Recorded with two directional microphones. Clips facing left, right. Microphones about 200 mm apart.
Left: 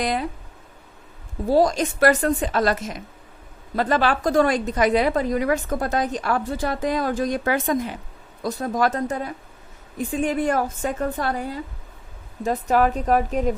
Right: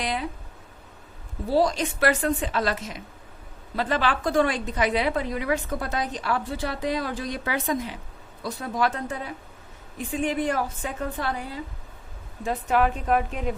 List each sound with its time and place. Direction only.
0.0 s a woman's voice: 45° left (ahead or behind)
1.5 s a woman's voice: 45° left (ahead or behind)